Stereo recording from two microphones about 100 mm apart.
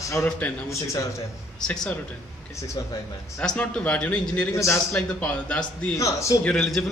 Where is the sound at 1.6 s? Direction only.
10° left (ahead or behind).